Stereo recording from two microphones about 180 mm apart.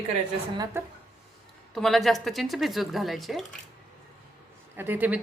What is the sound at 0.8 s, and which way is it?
Speech, 15° right (ahead or behind).